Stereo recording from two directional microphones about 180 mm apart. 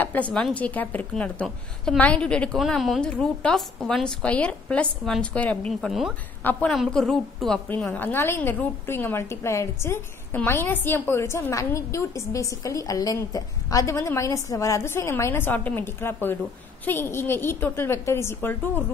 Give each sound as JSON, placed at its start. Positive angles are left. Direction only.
{"t": 0.0, "sound": "a woman's voice", "side_deg": 10}